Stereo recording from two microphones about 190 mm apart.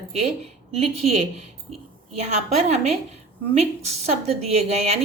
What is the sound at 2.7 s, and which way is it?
Speech, 35° right (ahead or behind).